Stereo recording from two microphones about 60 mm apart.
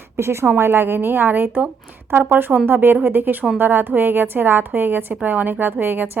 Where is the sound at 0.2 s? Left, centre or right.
Right.